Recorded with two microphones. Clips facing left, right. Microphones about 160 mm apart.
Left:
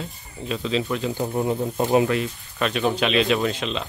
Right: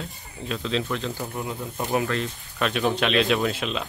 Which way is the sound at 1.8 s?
20° left (ahead or behind).